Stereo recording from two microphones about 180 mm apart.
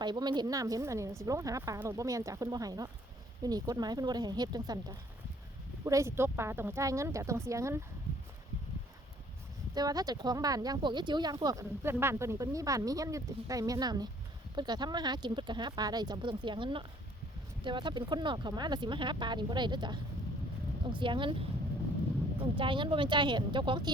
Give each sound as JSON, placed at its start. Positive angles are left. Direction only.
{"t": 0.0, "sound": "speech", "side_deg": -25}
{"t": 9.7, "sound": "speech", "side_deg": -20}